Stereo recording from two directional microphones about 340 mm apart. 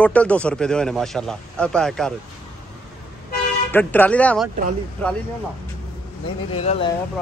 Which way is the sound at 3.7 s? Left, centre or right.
Centre.